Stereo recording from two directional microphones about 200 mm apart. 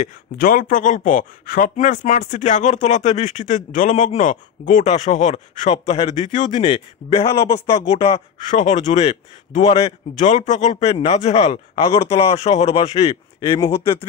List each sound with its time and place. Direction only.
0.0 s speech: 45° left (ahead or behind)